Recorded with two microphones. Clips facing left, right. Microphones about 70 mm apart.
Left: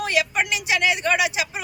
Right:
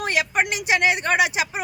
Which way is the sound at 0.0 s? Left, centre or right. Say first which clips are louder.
Even; right.